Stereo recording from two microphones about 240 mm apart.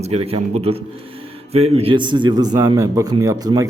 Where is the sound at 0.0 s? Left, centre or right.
Right.